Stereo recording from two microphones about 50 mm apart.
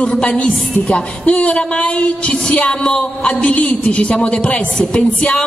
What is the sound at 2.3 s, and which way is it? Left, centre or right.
Music, centre.